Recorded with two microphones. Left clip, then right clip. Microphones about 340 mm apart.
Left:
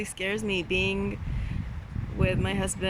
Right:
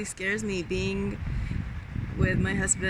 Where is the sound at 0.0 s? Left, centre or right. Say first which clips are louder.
Even; centre.